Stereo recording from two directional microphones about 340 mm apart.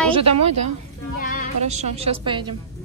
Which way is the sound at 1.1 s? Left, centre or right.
Left.